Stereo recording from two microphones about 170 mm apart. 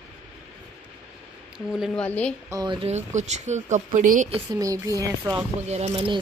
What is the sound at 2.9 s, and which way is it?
Speech, 45° right (ahead or behind).